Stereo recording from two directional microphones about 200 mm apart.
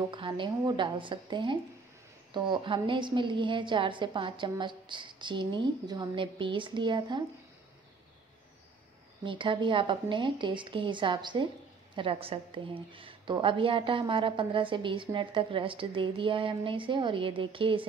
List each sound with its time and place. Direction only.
0.1 s a woman's voice: 25° right (ahead or behind)
9.2 s a woman's voice: 25° right (ahead or behind)